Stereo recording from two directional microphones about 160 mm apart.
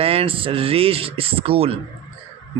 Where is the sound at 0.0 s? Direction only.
35° right (ahead or behind).